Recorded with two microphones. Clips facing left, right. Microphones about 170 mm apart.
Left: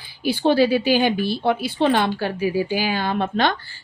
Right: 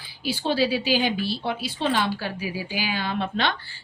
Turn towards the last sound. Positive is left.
turn(degrees=45)  # may be behind; listen again after turning